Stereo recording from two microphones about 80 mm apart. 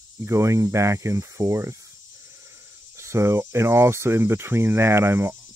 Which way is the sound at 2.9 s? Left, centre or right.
Right.